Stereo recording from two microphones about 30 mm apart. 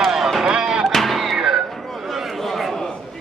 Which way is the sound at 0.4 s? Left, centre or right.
Centre.